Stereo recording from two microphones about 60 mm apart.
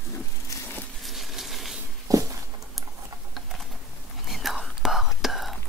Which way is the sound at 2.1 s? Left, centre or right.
Right.